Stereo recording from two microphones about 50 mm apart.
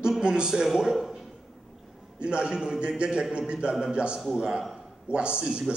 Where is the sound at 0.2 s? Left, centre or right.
Centre.